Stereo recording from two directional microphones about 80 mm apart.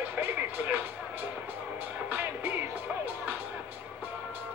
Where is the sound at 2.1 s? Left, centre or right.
Right.